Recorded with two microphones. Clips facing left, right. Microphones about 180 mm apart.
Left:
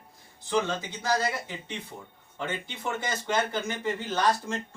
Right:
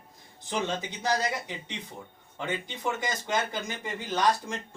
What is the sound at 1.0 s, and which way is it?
Speech, 20° right (ahead or behind).